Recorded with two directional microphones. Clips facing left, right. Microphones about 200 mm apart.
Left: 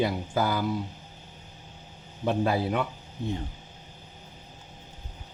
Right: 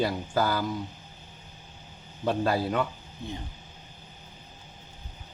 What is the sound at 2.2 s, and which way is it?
Speech, 5° left (ahead or behind).